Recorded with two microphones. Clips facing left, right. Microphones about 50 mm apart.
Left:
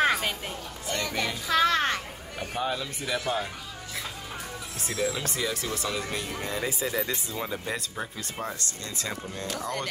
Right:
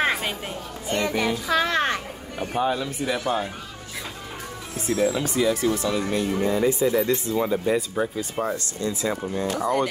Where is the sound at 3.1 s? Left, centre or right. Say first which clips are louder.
Right 2 dB; right.